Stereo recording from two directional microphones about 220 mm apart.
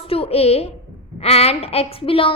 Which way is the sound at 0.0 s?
25° left (ahead or behind).